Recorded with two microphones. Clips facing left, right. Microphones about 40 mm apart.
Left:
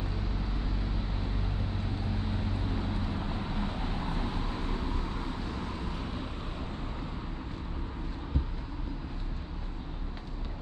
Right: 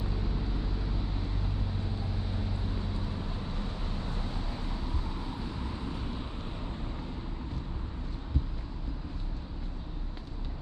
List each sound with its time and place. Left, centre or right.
1.8 s vehicle: left